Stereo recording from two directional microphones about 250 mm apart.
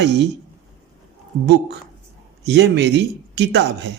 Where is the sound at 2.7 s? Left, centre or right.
Right.